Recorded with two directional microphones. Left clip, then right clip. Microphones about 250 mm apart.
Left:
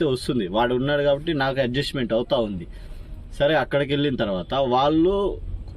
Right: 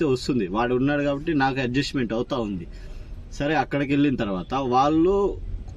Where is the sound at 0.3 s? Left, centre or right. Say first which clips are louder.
Left 2 dB; centre.